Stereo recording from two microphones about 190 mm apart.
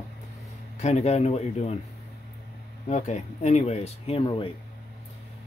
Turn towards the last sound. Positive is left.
turn(degrees=30)  # may be behind; listen again after turning